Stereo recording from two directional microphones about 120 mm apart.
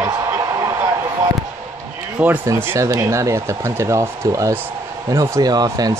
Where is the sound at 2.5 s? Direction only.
20° right (ahead or behind).